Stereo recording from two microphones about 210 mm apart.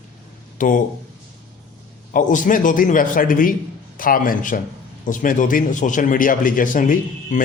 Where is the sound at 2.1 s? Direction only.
40° left (ahead or behind).